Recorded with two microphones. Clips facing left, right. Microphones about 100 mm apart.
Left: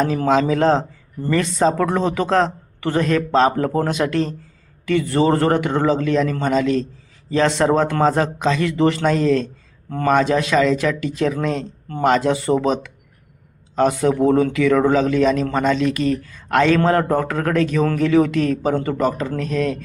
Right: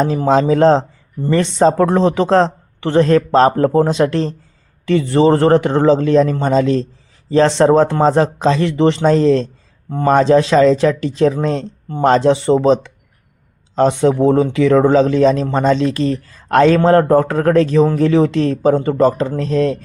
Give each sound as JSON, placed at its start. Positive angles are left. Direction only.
{"t": 0.0, "sound": "a man's voice", "side_deg": -30}